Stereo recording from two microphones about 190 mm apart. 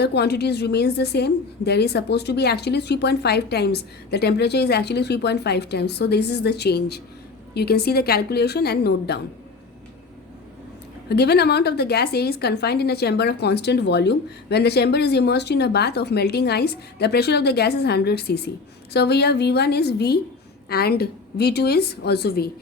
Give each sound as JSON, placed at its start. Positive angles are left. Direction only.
{"t": 0.0, "sound": "a woman's voice", "side_deg": 60}
{"t": 11.1, "sound": "a woman's voice", "side_deg": 60}